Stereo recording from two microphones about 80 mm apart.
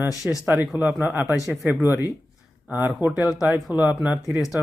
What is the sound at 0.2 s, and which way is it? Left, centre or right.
Speech, centre.